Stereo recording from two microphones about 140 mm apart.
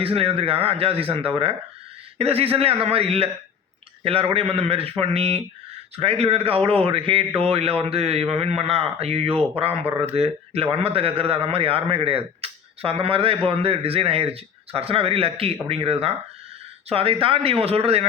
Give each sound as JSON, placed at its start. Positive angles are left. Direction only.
{"t": 0.0, "sound": "a man's voice", "side_deg": -45}
{"t": 2.1, "sound": "a man's voice", "side_deg": -45}